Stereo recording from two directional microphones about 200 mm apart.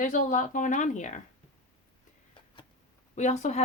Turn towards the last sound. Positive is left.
turn(degrees=35)  # may be behind; listen again after turning